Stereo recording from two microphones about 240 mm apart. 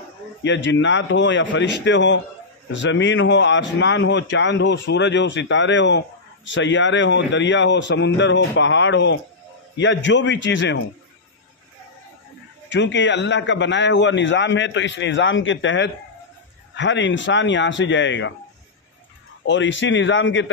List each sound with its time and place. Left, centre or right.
0.4 s speech: left
12.6 s speech: left
19.4 s speech: left